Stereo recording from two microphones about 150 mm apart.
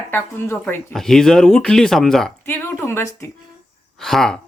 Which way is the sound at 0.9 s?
5° left (ahead or behind).